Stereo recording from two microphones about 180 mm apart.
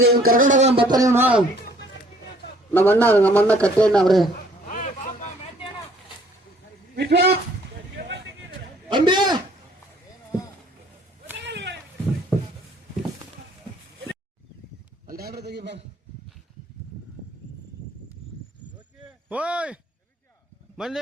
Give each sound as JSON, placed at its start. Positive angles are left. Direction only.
{"t": 0.0, "sound": "speech", "side_deg": -55}
{"t": 2.7, "sound": "a man's voice", "side_deg": 10}
{"t": 4.7, "sound": "vehicle", "side_deg": 45}
{"t": 6.9, "sound": "a man's voice", "side_deg": -65}
{"t": 8.9, "sound": "a man's voice", "side_deg": -25}
{"t": 11.3, "sound": "a sound", "side_deg": -75}
{"t": 15.0, "sound": "a man's voice", "side_deg": -55}
{"t": 19.3, "sound": "speech", "side_deg": -5}